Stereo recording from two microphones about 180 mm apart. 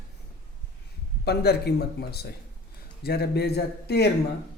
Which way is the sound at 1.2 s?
65° left (ahead or behind).